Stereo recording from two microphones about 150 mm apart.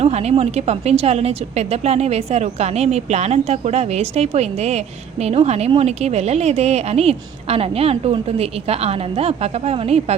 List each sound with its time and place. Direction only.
0.0 s a woman's voice: 45° right (ahead or behind)